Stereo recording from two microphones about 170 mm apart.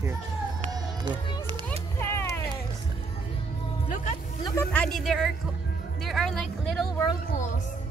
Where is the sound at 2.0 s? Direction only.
15° left (ahead or behind).